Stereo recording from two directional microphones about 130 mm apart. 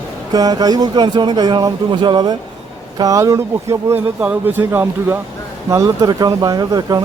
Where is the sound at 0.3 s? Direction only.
30° right (ahead or behind).